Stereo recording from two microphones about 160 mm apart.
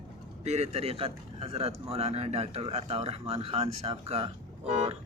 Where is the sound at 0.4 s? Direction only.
45° right (ahead or behind).